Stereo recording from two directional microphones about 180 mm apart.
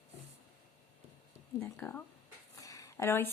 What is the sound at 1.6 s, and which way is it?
Speech, 10° left (ahead or behind).